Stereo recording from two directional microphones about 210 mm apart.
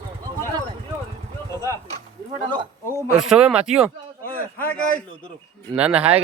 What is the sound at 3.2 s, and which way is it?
Speech, 5° right (ahead or behind).